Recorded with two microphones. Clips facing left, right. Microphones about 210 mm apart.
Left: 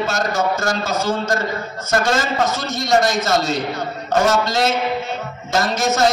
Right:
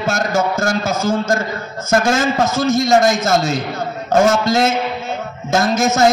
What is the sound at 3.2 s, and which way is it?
A man's voice, 50° right (ahead or behind).